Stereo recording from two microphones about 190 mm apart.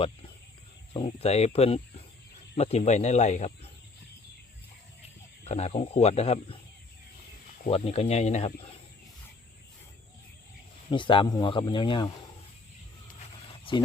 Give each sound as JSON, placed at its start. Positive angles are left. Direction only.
{"t": 0.9, "sound": "speech", "side_deg": 30}
{"t": 5.5, "sound": "speech", "side_deg": 35}
{"t": 7.7, "sound": "speech", "side_deg": 35}
{"t": 10.9, "sound": "speech", "side_deg": 25}
{"t": 13.5, "sound": "dog", "side_deg": 25}